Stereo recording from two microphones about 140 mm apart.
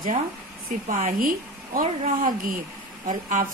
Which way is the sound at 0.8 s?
70° right (ahead or behind).